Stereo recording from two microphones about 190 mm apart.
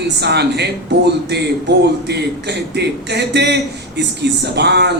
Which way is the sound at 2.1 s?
60° right (ahead or behind).